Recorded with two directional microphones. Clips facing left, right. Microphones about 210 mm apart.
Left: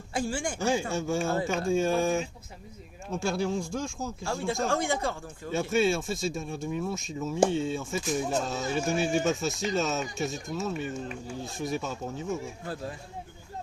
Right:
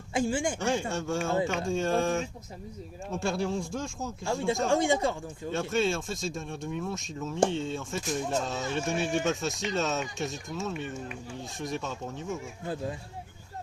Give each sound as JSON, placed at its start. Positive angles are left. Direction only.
{"t": 0.1, "sound": "speech", "side_deg": -20}
{"t": 0.6, "sound": "speech", "side_deg": 5}
{"t": 4.2, "sound": "speech", "side_deg": -20}
{"t": 5.5, "sound": "speech", "side_deg": 5}
{"t": 12.6, "sound": "speech", "side_deg": -20}